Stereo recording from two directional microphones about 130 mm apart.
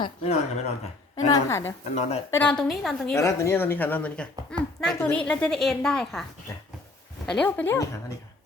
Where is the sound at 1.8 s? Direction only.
55° left (ahead or behind).